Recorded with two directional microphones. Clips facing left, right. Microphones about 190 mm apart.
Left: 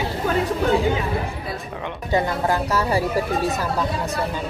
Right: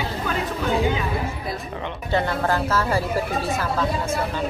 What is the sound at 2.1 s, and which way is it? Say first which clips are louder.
Speech: left 1 dB; 10° left (ahead or behind).